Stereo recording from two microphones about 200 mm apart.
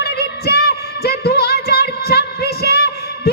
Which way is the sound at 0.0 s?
55° left (ahead or behind).